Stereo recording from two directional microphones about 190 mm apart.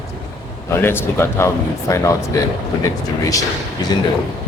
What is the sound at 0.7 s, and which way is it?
Speech, 10° left (ahead or behind).